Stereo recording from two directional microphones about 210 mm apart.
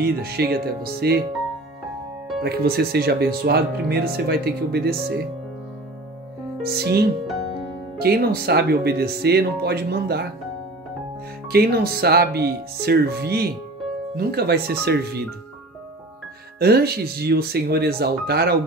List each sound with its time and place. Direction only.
0.0 s speech: 50° right (ahead or behind)
2.4 s speech: 50° right (ahead or behind)
6.6 s speech: 50° right (ahead or behind)
11.4 s speech: 45° right (ahead or behind)
16.5 s speech: 50° right (ahead or behind)